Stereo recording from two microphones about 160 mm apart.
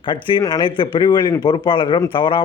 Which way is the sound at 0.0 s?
30° left (ahead or behind).